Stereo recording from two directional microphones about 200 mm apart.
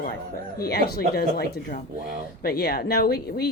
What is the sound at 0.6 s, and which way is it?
A woman's voice, 50° left (ahead or behind).